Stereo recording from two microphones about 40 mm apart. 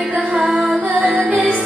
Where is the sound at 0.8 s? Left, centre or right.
Right.